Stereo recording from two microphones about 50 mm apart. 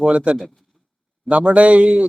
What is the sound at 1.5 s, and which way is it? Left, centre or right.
Speech, right.